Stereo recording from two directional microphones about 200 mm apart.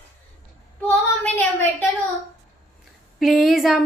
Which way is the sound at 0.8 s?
10° left (ahead or behind).